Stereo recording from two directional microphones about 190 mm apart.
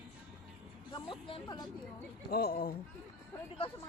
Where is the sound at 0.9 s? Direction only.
25° left (ahead or behind).